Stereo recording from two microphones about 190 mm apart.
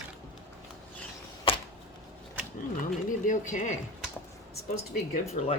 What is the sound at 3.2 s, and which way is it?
Speech, 40° left (ahead or behind).